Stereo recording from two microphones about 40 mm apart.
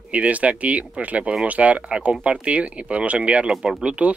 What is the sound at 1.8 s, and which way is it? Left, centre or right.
Speech, right.